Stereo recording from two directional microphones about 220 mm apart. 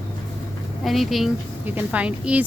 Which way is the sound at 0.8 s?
Centre (ahead or behind).